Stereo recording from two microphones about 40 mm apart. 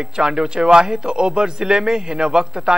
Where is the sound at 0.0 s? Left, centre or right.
Right.